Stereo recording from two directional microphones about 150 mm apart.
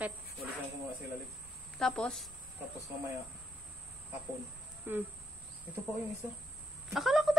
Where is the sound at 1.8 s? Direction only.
5° left (ahead or behind).